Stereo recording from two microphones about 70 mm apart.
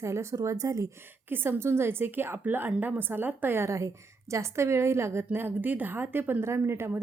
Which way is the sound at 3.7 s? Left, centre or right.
Right.